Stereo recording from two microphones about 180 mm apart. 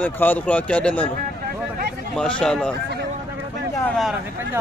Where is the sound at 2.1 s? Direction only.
5° left (ahead or behind).